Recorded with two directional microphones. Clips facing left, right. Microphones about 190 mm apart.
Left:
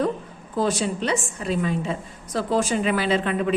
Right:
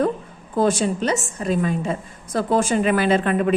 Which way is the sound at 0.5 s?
50° right (ahead or behind).